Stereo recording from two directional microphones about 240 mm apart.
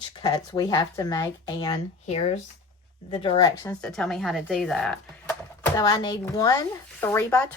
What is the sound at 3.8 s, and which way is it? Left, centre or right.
Speech, centre.